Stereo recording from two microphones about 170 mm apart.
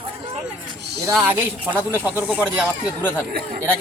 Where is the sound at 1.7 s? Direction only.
10° right (ahead or behind).